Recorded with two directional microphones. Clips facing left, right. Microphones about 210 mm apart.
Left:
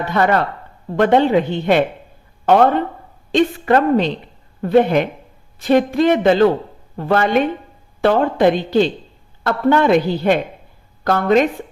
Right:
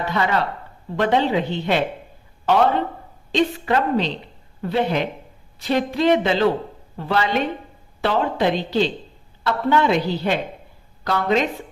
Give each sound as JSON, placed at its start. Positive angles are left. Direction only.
{"t": 0.1, "sound": "a woman's voice", "side_deg": 50}